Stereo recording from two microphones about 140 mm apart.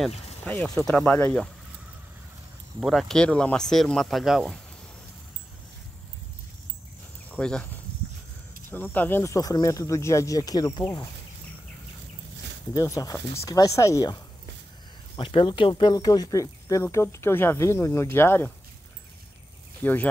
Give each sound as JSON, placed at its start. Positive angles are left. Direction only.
{"t": 0.8, "sound": "speech", "side_deg": 5}
{"t": 2.8, "sound": "speech", "side_deg": 0}
{"t": 7.3, "sound": "speech", "side_deg": 5}
{"t": 8.6, "sound": "speech", "side_deg": 15}
{"t": 12.7, "sound": "speech", "side_deg": 25}
{"t": 15.1, "sound": "speech", "side_deg": 40}
{"t": 19.8, "sound": "speech", "side_deg": 15}